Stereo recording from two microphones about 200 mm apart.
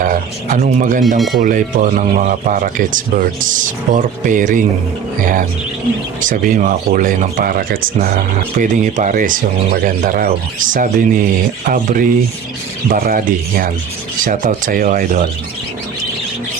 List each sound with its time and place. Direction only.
0.0 s speech: 40° right (ahead or behind)